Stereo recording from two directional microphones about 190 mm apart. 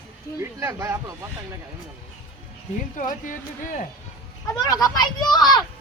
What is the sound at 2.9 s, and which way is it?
Speech, 45° left (ahead or behind).